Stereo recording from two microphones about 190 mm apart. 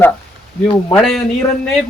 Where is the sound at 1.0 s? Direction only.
Centre (ahead or behind).